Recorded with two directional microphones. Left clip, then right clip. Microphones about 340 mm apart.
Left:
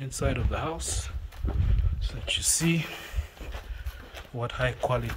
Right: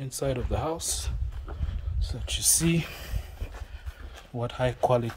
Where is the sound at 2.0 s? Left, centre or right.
Centre.